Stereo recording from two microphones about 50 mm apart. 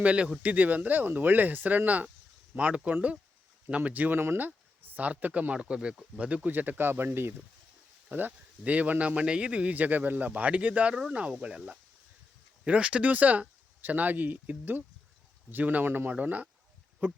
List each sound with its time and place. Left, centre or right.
0.0 s speech: right
3.8 s speech: right
4.1 s speech: right
4.4 s speech: right
6.5 s speech: right
8.1 s speech: right
17.0 s speech: right